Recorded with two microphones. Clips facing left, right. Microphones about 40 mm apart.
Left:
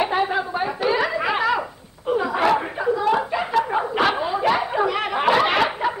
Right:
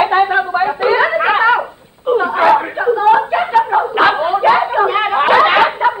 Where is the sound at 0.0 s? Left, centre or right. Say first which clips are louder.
Right 9 dB; right.